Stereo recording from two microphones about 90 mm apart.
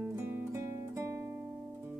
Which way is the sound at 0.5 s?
30° right (ahead or behind).